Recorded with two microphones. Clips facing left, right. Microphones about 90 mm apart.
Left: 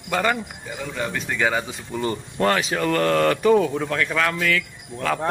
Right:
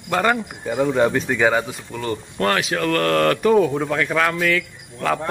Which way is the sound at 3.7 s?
10° right (ahead or behind).